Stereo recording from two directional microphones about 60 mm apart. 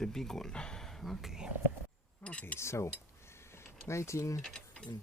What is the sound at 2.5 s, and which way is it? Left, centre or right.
Speech, left.